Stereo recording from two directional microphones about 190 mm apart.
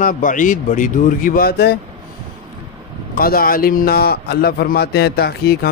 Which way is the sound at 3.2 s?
50° left (ahead or behind).